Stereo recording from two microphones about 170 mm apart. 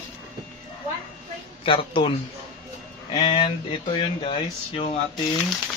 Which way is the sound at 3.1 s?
35° left (ahead or behind).